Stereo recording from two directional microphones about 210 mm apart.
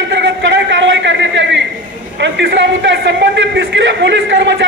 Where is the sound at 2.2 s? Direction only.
60° right (ahead or behind).